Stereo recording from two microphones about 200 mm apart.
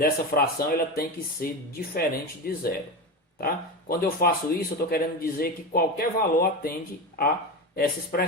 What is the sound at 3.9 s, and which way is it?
Speech, 50° left (ahead or behind).